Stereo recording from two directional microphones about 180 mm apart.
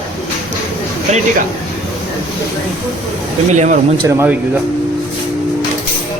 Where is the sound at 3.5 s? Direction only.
40° right (ahead or behind).